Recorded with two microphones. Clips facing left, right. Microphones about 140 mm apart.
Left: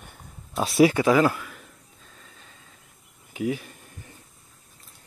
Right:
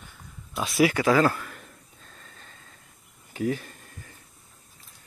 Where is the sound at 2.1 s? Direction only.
5° left (ahead or behind).